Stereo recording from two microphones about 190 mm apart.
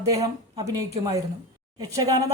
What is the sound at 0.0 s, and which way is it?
Speech, 20° right (ahead or behind).